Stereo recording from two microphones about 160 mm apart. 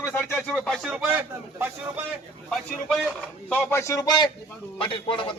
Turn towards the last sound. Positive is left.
turn(degrees=35)  # may be behind; listen again after turning